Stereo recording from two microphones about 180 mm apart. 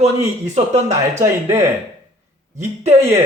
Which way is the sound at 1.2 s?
15° right (ahead or behind).